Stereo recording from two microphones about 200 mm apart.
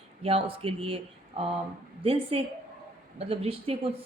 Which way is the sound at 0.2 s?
30° right (ahead or behind).